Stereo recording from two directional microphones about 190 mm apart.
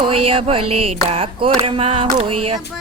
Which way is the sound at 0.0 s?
30° right (ahead or behind).